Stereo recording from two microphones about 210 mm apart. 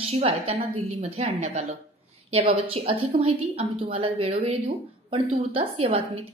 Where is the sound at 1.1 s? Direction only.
30° right (ahead or behind).